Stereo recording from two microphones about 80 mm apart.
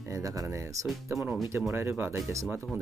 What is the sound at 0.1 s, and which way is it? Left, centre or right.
Speech, right.